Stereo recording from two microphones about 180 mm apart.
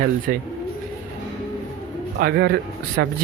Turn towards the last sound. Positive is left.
turn(degrees=-65)  # may be behind; listen again after turning